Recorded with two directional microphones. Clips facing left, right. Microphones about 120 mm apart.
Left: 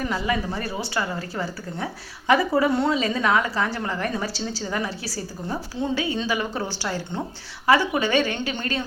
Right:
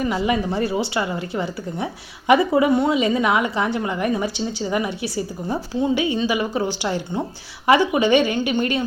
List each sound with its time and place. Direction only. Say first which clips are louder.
0.2 s a woman's voice: right 5 dB; 20° right (ahead or behind)